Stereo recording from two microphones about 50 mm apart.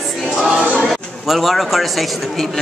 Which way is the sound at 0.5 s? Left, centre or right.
Right.